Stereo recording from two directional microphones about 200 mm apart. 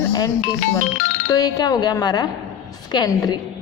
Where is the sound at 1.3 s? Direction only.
20° left (ahead or behind).